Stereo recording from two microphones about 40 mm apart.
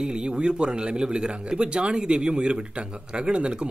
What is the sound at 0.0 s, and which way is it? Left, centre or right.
Speech, right.